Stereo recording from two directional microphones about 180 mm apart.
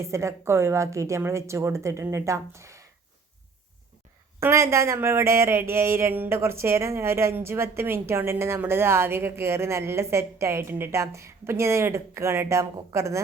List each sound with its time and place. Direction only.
0.0 s speech: 15° right (ahead or behind)
4.4 s speech: 15° right (ahead or behind)